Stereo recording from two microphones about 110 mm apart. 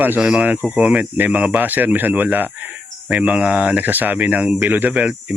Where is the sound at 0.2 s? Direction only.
5° right (ahead or behind).